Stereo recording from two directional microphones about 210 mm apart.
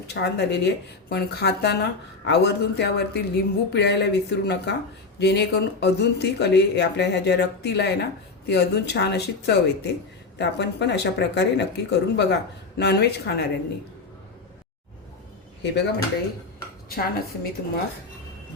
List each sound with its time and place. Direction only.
0.1 s speech: 50° left (ahead or behind)
15.6 s speech: 55° left (ahead or behind)
16.9 s speech: 45° left (ahead or behind)